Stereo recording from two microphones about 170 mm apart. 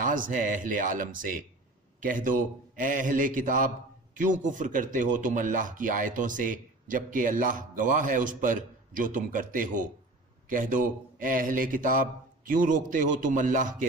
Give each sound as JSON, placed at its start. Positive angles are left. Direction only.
{"t": 0.0, "sound": "speech", "side_deg": -50}